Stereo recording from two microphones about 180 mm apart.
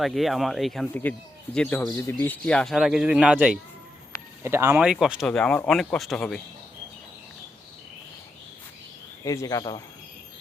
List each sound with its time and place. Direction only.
0.0 s speech: centre (ahead or behind)
9.2 s speech: 20° left (ahead or behind)